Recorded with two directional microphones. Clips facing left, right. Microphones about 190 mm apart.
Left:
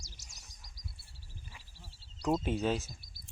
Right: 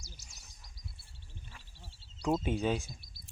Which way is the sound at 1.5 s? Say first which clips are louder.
Even; centre (ahead or behind).